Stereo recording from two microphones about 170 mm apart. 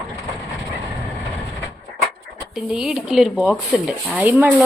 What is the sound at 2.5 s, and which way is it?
Speech, 5° right (ahead or behind).